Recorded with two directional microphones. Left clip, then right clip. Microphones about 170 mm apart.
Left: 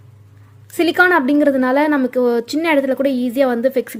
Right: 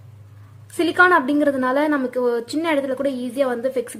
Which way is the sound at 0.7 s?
25° left (ahead or behind).